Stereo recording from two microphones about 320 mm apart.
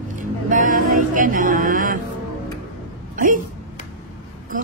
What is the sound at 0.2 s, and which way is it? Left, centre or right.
Music, right.